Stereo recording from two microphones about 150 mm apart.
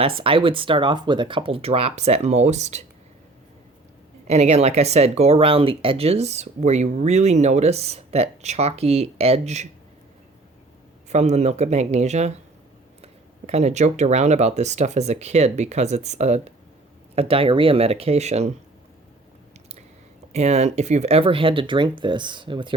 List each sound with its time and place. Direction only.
0.0 s speech: 35° right (ahead or behind)
4.3 s speech: 45° right (ahead or behind)
11.1 s speech: 50° right (ahead or behind)
13.5 s speech: 45° right (ahead or behind)
20.3 s speech: 50° right (ahead or behind)